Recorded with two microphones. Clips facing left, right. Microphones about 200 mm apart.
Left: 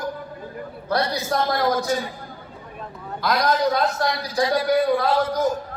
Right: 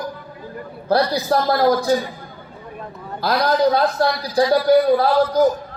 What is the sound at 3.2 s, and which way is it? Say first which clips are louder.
A man's voice: right 4 dB; 30° right (ahead or behind).